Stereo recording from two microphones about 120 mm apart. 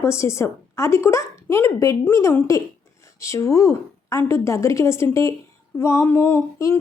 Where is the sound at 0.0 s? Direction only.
25° left (ahead or behind).